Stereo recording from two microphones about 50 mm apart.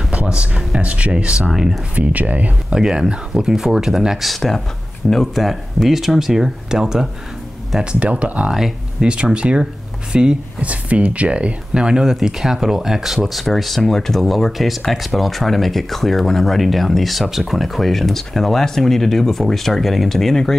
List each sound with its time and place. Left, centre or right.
0.1 s speech: right
1.5 s speech: centre
2.0 s speech: right
2.7 s speech: centre
4.3 s speech: centre
7.8 s speech: right
8.5 s speech: centre
9.0 s speech: centre